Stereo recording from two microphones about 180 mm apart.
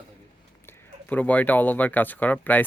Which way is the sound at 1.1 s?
10° left (ahead or behind).